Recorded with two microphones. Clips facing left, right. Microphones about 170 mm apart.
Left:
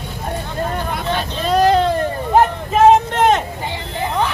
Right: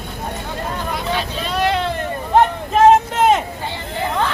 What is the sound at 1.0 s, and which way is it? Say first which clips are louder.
Speech: left 1 dB; 45° left (ahead or behind).